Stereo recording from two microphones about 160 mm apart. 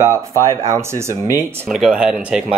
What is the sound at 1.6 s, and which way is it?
Speech, centre (ahead or behind).